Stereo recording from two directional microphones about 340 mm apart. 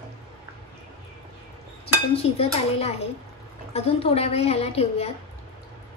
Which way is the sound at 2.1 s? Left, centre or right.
Centre.